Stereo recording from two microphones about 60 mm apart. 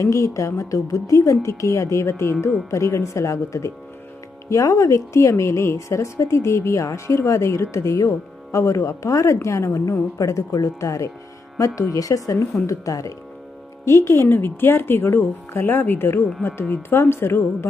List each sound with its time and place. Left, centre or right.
0.0 s speech: left
4.4 s speech: left
13.8 s speech: left